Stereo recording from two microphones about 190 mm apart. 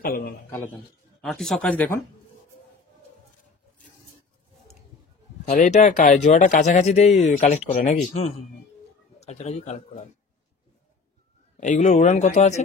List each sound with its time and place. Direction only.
0.0 s a man's voice: 50° left (ahead or behind)
1.2 s speech: centre (ahead or behind)
5.4 s speech: 40° left (ahead or behind)
11.6 s speech: 40° left (ahead or behind)